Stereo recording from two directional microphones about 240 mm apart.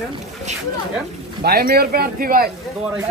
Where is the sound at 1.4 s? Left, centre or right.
Right.